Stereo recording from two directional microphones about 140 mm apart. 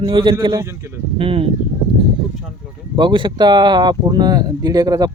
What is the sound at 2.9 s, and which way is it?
Speech, 35° right (ahead or behind).